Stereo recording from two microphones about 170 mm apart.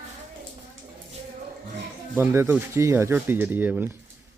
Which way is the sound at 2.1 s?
15° right (ahead or behind).